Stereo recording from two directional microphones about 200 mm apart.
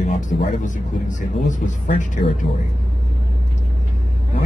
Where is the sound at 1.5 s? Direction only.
40° left (ahead or behind).